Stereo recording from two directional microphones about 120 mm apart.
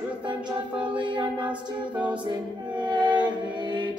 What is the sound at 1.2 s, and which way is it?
A capella, 10° right (ahead or behind).